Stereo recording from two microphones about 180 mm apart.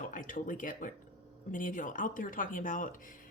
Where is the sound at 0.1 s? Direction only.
45° left (ahead or behind).